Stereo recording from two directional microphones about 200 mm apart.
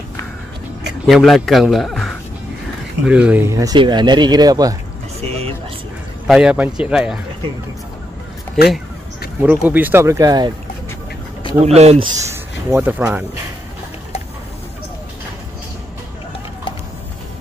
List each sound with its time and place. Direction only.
1.0 s speech: centre (ahead or behind); by 4.7 s 20° right (ahead or behind)
5.2 s a sound: 30° right (ahead or behind)
6.2 s speech: 5° right (ahead or behind)
9.4 s speech: 10° right (ahead or behind)
11.6 s speech: 30° right (ahead or behind)
12.6 s speech: 10° right (ahead or behind)